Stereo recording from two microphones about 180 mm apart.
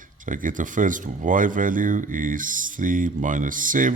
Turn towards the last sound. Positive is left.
turn(degrees=-45)  # may be behind; listen again after turning